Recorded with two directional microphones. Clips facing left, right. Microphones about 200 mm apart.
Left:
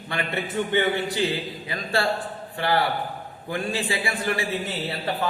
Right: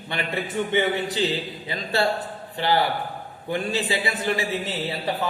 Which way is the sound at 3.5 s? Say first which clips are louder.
Right 2 dB; 20° right (ahead or behind).